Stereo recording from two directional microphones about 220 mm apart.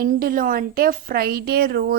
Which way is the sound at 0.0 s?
40° right (ahead or behind).